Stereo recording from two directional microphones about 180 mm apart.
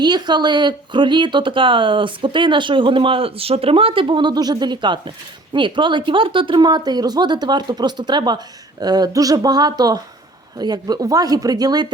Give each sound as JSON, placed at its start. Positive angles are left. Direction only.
{"t": 0.0, "sound": "a woman's voice", "side_deg": -25}